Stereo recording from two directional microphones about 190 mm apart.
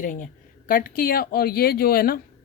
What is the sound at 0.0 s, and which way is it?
A woman's voice, 45° left (ahead or behind).